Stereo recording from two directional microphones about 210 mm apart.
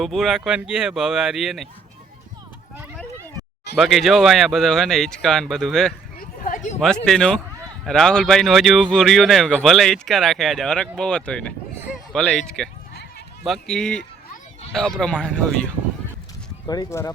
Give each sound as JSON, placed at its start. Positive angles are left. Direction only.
{"t": 0.0, "sound": "speech", "side_deg": 0}
{"t": 3.8, "sound": "speech", "side_deg": 0}
{"t": 6.1, "sound": "a sound", "side_deg": 40}
{"t": 6.7, "sound": "speech", "side_deg": 5}
{"t": 12.9, "sound": "sheep", "side_deg": 50}
{"t": 13.4, "sound": "speech", "side_deg": 0}
{"t": 16.6, "sound": "speech", "side_deg": 15}